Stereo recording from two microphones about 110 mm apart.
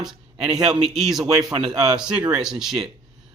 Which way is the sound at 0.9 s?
5° right (ahead or behind).